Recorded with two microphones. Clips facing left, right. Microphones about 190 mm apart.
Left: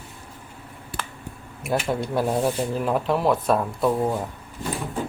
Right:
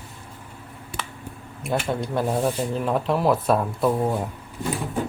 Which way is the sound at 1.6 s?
5° left (ahead or behind).